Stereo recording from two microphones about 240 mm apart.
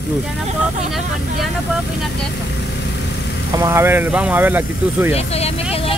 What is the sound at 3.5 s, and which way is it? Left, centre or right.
Speech, centre.